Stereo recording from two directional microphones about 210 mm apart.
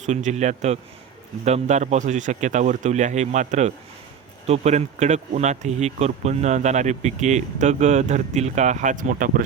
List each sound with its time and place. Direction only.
0.0 s speech: 35° right (ahead or behind)